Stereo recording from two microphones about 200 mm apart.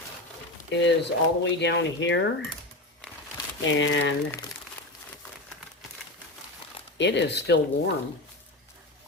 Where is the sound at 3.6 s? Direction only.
70° left (ahead or behind).